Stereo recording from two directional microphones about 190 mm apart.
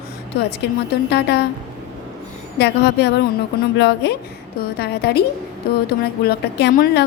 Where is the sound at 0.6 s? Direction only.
65° left (ahead or behind).